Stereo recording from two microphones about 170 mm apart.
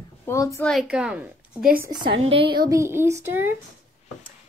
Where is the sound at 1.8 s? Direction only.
25° right (ahead or behind).